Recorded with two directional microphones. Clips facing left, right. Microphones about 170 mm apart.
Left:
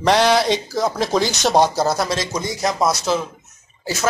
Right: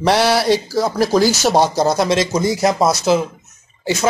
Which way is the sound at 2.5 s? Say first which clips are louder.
Right 2 dB; 25° right (ahead or behind).